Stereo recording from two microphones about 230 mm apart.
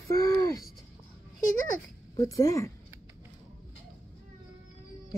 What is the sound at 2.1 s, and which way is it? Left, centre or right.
Speech, centre.